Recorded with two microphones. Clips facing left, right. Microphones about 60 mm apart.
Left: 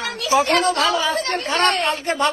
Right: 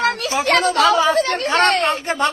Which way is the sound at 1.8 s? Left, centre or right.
Right.